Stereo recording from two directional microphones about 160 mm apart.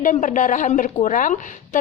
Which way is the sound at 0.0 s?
50° left (ahead or behind).